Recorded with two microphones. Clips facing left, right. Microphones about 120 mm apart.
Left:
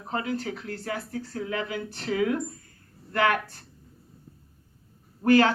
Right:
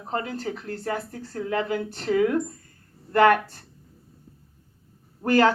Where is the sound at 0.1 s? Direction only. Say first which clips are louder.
Right 1 dB; 40° right (ahead or behind).